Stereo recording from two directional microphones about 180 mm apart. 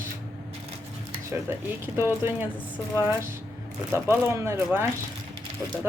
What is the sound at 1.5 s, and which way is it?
Speech, 15° right (ahead or behind).